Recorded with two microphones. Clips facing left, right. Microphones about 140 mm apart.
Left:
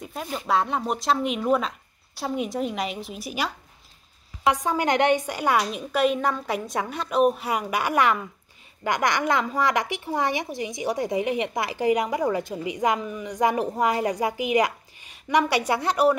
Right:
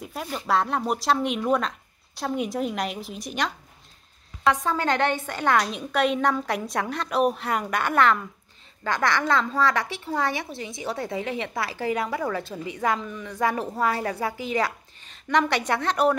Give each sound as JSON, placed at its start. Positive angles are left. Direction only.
{"t": 0.0, "sound": "a woman's voice", "side_deg": 0}